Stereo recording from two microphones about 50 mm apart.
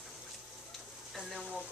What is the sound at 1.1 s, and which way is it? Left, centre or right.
Speech, centre.